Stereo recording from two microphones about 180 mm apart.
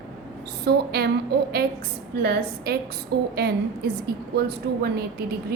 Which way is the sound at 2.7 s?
60° right (ahead or behind).